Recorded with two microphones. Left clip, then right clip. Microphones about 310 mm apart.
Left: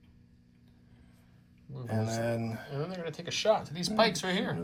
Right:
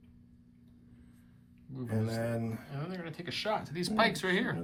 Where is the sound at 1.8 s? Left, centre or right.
Centre.